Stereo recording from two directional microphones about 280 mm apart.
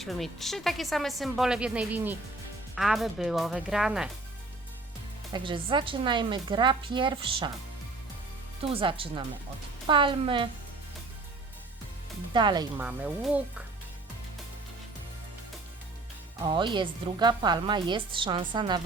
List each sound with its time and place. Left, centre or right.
0.0 s a woman's voice: centre
5.3 s a woman's voice: centre
8.7 s a woman's voice: centre
12.3 s a woman's voice: centre
16.5 s a woman's voice: centre